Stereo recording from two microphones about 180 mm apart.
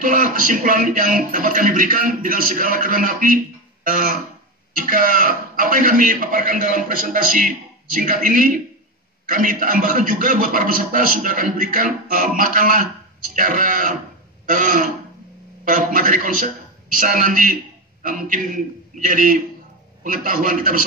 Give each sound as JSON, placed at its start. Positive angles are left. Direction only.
{"t": 0.0, "sound": "a man's voice", "side_deg": -50}
{"t": 14.4, "sound": "throat clearing", "side_deg": -50}
{"t": 15.6, "sound": "a man's voice", "side_deg": -50}